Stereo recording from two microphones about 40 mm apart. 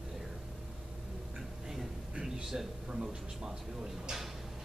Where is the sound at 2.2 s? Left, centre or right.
Centre.